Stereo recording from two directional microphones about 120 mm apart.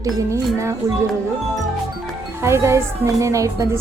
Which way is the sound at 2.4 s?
25° right (ahead or behind).